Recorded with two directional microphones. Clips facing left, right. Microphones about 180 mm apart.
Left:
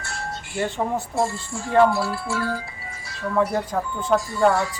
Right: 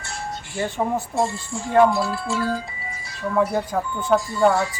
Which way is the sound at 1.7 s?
20° right (ahead or behind).